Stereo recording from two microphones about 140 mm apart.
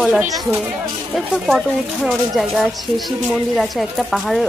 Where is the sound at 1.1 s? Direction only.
Centre (ahead or behind).